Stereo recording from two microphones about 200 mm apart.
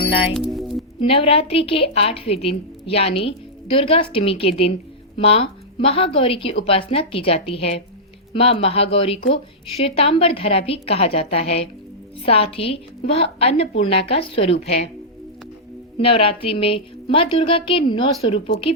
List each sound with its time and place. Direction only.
0.3 s music: centre (ahead or behind)
1.0 s a woman's voice: 30° left (ahead or behind)
16.0 s a woman's voice: 30° left (ahead or behind)